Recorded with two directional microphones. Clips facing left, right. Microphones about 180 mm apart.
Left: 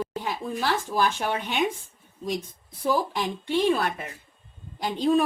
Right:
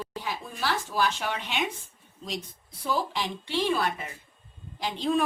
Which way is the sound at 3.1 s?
55° left (ahead or behind).